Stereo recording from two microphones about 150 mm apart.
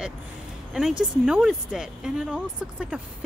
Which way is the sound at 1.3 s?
Centre (ahead or behind).